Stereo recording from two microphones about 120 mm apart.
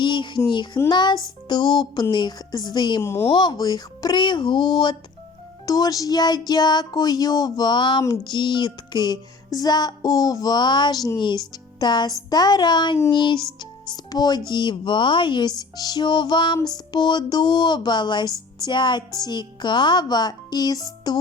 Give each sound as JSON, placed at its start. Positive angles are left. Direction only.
{"t": 0.0, "sound": "speech", "side_deg": 40}
{"t": 0.8, "sound": "music", "side_deg": 35}
{"t": 3.0, "sound": "speech", "side_deg": 20}
{"t": 3.3, "sound": "music", "side_deg": 40}